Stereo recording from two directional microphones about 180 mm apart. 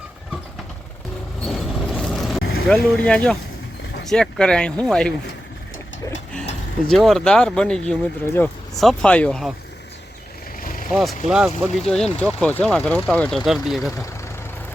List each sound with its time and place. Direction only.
1.5 s vehicle: centre (ahead or behind)
2.4 s vehicle: 60° left (ahead or behind)
2.6 s speech: centre (ahead or behind)
6.9 s speech: centre (ahead or behind)
10.9 s speech: 5° right (ahead or behind)
12.2 s speech: 10° left (ahead or behind)